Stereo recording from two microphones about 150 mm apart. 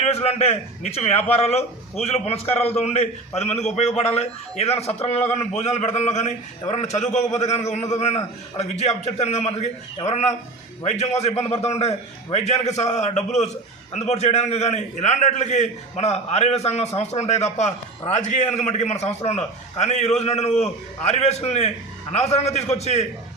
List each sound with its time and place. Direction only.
0.0 s a man's voice: 40° left (ahead or behind)
10.0 s a man's voice: 20° left (ahead or behind)
10.8 s a man's voice: 50° left (ahead or behind)